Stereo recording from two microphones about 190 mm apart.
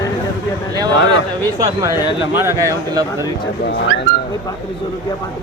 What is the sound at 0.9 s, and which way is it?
Speech, 90° left.